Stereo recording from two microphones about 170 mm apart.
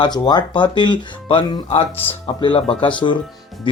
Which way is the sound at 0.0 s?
25° left (ahead or behind).